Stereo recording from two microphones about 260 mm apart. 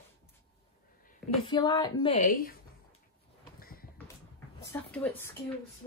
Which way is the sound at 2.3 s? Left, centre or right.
Left.